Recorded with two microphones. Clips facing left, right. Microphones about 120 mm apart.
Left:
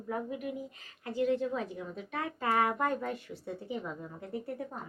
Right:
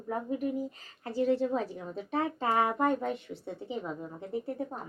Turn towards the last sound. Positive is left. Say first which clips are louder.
# right 4 dB
turn(degrees=-25)  # may be behind; listen again after turning